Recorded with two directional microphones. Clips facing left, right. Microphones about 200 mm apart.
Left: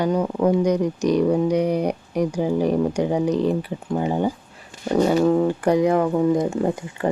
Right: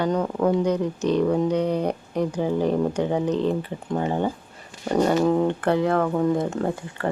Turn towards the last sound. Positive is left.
turn(degrees=15)  # may be behind; listen again after turning